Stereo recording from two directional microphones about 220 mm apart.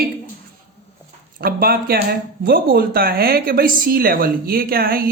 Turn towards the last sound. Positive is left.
turn(degrees=-40)  # may be behind; listen again after turning